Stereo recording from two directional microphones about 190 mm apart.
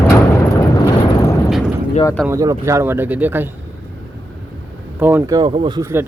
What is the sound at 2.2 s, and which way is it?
Speech, 15° right (ahead or behind).